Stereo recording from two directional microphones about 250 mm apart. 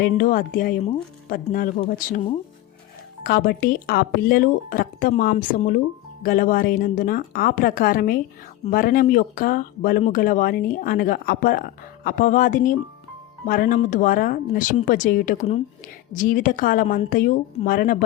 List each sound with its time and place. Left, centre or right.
0.0 s speech: left
3.2 s speech: left